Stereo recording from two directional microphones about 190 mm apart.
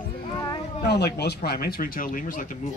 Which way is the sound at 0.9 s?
60° left (ahead or behind).